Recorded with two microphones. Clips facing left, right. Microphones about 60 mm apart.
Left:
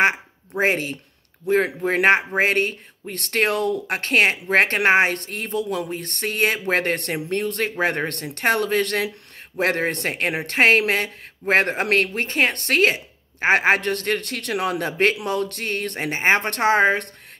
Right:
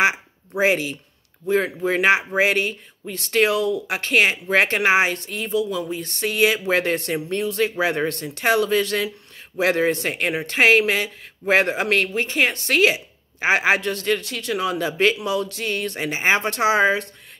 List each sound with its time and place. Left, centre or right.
0.0 s quack: left
1.9 s speech: left